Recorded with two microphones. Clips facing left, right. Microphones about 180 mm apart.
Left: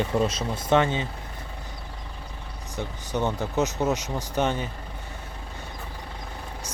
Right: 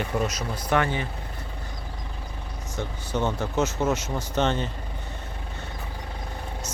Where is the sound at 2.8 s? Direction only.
15° left (ahead or behind).